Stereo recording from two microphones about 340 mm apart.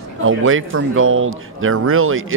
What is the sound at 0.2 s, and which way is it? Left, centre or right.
A man's voice, right.